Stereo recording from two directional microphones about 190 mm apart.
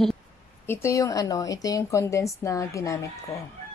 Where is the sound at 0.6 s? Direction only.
15° left (ahead or behind).